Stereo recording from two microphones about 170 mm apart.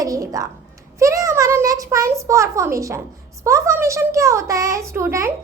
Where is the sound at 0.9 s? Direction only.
20° right (ahead or behind).